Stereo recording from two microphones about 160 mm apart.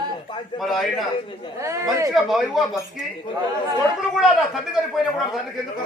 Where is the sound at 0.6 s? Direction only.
Centre (ahead or behind).